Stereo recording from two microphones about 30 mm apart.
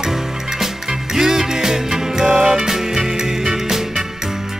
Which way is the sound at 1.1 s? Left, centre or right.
Centre.